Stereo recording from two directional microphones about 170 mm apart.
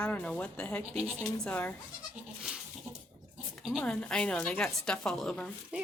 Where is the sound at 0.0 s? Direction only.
5° left (ahead or behind).